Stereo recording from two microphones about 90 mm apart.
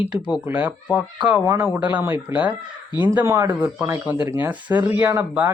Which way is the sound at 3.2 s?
35° right (ahead or behind).